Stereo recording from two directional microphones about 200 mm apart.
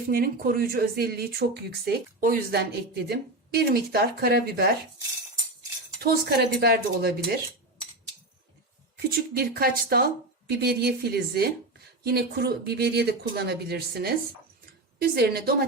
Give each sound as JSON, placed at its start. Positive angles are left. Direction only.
{"t": 0.1, "sound": "speech", "side_deg": -50}
{"t": 6.0, "sound": "speech", "side_deg": -50}
{"t": 9.0, "sound": "speech", "side_deg": -50}